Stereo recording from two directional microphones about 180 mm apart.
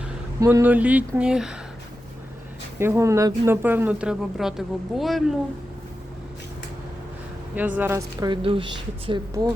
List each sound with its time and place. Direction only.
0.3 s speech: 15° right (ahead or behind)
2.7 s speech: 15° right (ahead or behind)
7.5 s a woman's voice: 10° right (ahead or behind)